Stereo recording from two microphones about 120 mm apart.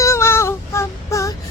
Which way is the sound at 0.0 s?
25° left (ahead or behind).